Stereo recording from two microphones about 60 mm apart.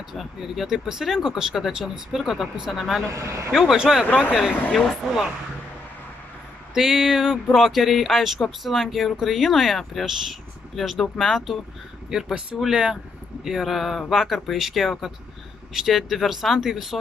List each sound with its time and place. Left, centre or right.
0.1 s speech: centre
3.1 s speech: right
3.5 s a sound: centre
4.1 s speech: left
4.7 s speech: centre
6.7 s a sound: centre
7.5 s speech: centre
12.1 s a sound: centre
13.4 s speech: centre